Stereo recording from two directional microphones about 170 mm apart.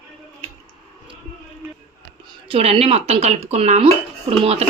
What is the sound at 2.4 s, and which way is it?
Speech, 35° right (ahead or behind).